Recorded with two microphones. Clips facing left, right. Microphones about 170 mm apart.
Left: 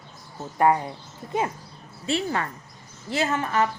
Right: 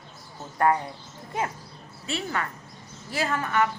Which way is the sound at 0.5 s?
20° left (ahead or behind).